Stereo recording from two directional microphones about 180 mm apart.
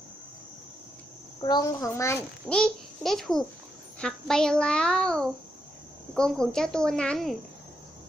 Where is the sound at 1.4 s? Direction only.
20° left (ahead or behind).